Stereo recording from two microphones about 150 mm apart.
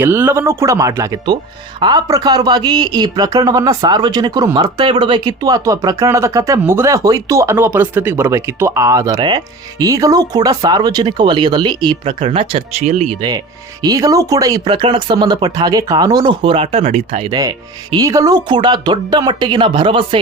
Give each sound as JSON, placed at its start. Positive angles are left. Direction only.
{"t": 0.0, "sound": "speech", "side_deg": -15}
{"t": 13.8, "sound": "speech", "side_deg": -25}
{"t": 17.9, "sound": "speech", "side_deg": -20}